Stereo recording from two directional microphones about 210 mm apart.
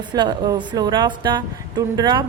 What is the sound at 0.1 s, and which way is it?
A woman's voice, 20° right (ahead or behind).